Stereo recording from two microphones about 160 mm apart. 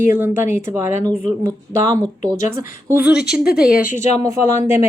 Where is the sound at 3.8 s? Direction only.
50° left (ahead or behind).